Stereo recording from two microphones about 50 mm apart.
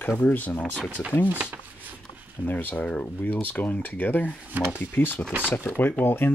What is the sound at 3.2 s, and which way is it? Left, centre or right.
Speech, left.